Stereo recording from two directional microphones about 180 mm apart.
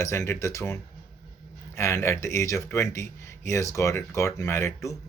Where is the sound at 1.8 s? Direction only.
15° left (ahead or behind).